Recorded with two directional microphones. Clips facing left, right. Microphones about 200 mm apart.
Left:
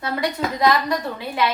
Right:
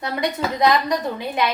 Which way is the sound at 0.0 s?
20° right (ahead or behind).